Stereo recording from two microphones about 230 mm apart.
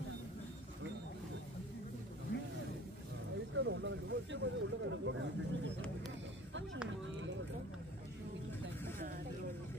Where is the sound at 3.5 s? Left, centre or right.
Right.